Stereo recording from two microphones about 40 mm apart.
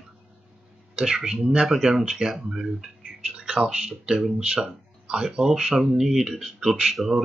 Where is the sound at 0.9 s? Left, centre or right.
Centre.